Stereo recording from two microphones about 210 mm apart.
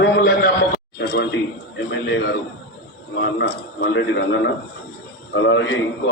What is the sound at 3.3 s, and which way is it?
A man's voice, 55° left (ahead or behind).